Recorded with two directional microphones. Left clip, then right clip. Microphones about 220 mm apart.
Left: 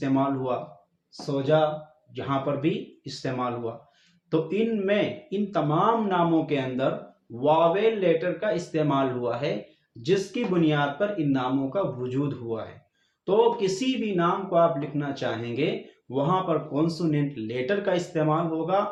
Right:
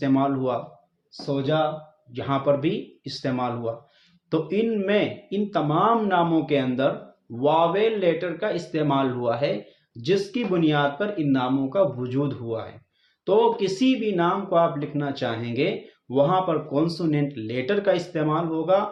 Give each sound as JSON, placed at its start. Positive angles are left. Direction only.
{"t": 0.0, "sound": "speech", "side_deg": -45}